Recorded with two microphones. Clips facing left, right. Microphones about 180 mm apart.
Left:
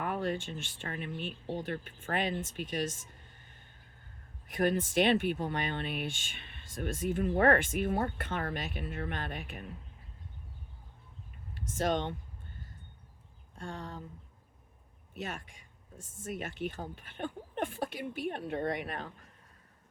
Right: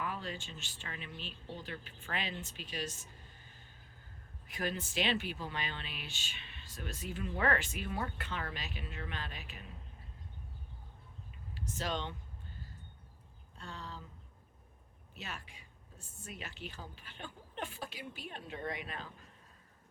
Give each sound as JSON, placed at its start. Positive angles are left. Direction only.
{"t": 0.0, "sound": "speech", "side_deg": 60}
{"t": 4.5, "sound": "speech", "side_deg": 55}
{"t": 11.8, "sound": "speech", "side_deg": 55}
{"t": 13.6, "sound": "speech", "side_deg": 50}
{"t": 16.2, "sound": "speech", "side_deg": 50}